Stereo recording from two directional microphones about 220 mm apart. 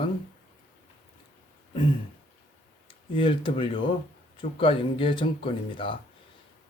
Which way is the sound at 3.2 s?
25° left (ahead or behind).